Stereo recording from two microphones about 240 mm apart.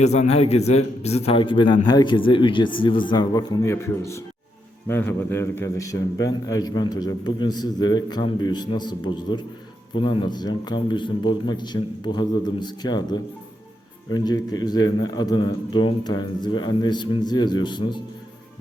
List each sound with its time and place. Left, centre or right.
0.0 s a man's voice: left